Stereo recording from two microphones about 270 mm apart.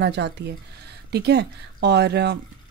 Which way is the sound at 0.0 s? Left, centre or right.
Right.